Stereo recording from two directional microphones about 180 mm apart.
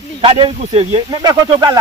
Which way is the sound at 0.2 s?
30° right (ahead or behind).